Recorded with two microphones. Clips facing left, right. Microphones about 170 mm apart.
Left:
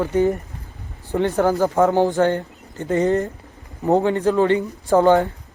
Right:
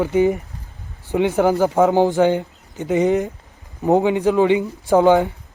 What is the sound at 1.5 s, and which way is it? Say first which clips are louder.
Speech: right 2 dB; 15° right (ahead or behind).